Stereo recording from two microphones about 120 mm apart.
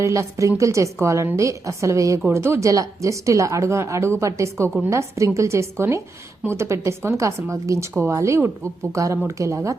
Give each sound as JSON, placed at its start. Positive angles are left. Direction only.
{"t": 0.0, "sound": "speech", "side_deg": -25}